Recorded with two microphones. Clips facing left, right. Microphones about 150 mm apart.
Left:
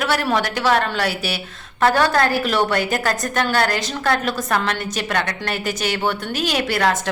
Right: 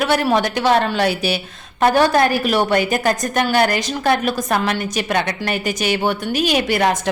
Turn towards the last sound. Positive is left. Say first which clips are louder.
# right 3 dB
turn(degrees=-15)  # may be behind; listen again after turning